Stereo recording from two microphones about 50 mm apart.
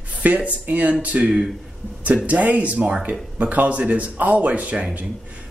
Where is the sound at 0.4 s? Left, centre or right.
Right.